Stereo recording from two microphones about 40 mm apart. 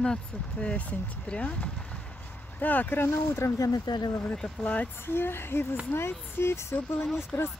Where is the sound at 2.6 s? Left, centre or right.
Left.